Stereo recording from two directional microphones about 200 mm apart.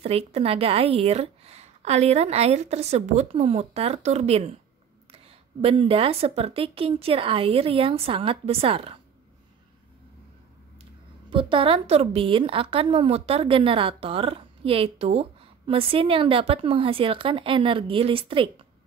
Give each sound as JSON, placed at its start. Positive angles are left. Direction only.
{"t": 0.0, "sound": "a woman's voice", "side_deg": -30}
{"t": 11.2, "sound": "a woman's voice", "side_deg": -25}